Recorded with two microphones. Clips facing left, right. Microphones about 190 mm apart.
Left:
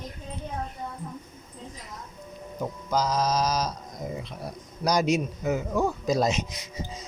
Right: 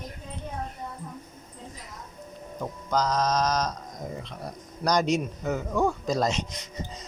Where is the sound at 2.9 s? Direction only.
5° left (ahead or behind).